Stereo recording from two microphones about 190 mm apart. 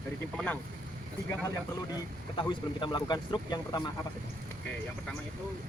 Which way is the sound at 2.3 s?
25° left (ahead or behind).